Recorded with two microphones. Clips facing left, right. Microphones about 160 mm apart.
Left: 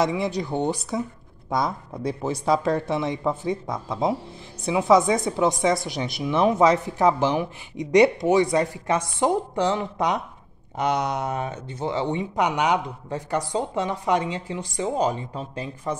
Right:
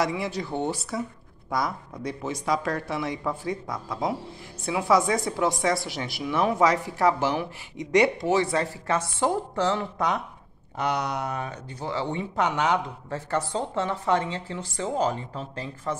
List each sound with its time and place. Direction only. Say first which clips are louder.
0.0 s a woman's voice: left 4 dB; 20° left (ahead or behind)